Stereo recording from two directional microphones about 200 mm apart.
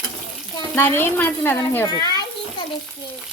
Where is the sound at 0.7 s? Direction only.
10° left (ahead or behind).